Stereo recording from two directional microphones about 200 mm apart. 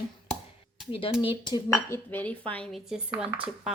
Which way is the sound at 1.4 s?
15° left (ahead or behind).